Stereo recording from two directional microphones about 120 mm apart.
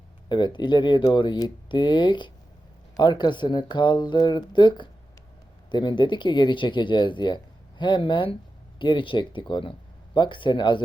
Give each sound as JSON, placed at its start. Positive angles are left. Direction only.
{"t": 0.3, "sound": "speech", "side_deg": 40}